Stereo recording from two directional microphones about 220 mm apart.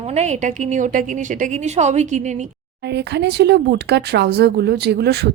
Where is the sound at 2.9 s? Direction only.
50° right (ahead or behind).